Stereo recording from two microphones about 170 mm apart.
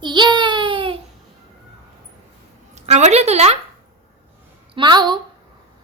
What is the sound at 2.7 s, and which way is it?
Speech, 40° right (ahead or behind).